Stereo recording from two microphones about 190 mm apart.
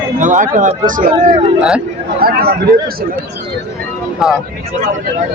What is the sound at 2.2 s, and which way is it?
Speech, 55° right (ahead or behind).